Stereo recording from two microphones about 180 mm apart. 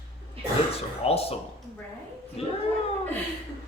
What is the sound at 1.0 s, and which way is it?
A man's voice, 35° left (ahead or behind).